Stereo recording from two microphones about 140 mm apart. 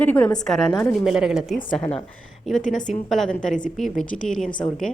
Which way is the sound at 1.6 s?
10° left (ahead or behind).